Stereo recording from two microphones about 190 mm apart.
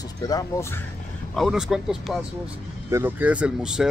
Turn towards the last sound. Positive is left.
turn(degrees=-5)  # may be behind; listen again after turning